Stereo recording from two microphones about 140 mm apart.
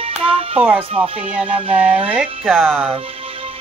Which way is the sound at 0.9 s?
40° right (ahead or behind).